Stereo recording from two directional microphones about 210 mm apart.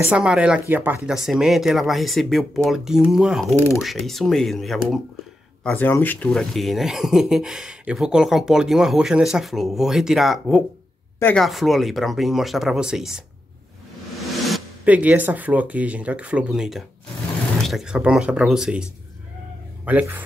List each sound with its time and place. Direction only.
0.1 s speech: 5° right (ahead or behind)
14.4 s a man's voice: 5° right (ahead or behind)